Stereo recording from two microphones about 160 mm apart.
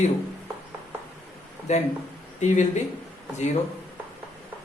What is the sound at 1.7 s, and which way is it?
Speech, 45° left (ahead or behind).